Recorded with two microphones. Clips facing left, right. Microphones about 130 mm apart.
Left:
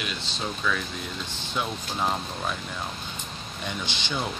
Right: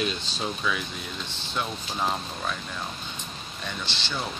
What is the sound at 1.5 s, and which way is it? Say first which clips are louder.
Speech: left 1 dB; 5° left (ahead or behind).